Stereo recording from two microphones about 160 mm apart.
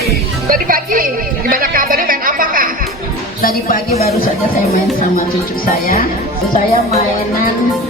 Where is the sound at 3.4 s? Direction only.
65° left (ahead or behind).